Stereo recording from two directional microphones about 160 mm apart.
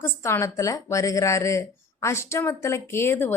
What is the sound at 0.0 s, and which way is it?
A woman's voice, 15° left (ahead or behind).